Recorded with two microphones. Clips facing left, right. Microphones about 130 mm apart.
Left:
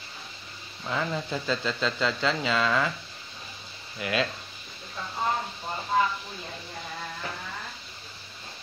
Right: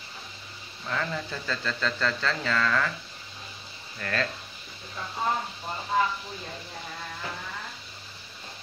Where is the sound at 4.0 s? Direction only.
15° left (ahead or behind).